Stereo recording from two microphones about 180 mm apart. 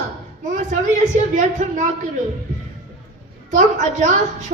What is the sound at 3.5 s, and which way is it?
Speech, 45° right (ahead or behind).